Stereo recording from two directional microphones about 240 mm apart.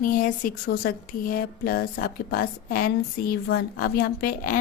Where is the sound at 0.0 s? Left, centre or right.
Left.